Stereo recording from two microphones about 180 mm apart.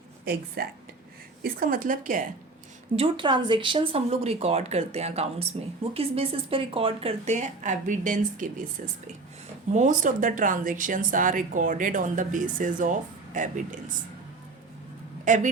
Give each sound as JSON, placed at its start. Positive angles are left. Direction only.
{"t": 0.3, "sound": "speech", "side_deg": -55}
{"t": 2.9, "sound": "speech", "side_deg": -30}
{"t": 9.7, "sound": "speech", "side_deg": -45}
{"t": 15.2, "sound": "speech", "side_deg": -45}